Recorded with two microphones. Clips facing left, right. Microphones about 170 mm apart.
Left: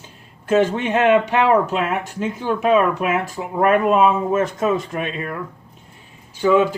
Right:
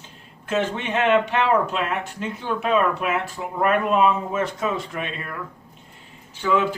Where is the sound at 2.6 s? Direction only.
45° left (ahead or behind).